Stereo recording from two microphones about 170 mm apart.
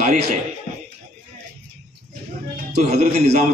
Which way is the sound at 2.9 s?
40° right (ahead or behind).